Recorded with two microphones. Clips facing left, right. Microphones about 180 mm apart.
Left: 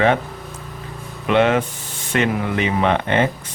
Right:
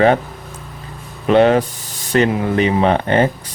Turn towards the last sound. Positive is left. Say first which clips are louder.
# right 4 dB
turn(degrees=-35)  # may be behind; listen again after turning